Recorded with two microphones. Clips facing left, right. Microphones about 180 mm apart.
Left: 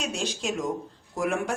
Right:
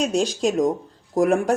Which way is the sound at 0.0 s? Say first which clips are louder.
Right 10 dB; 40° right (ahead or behind).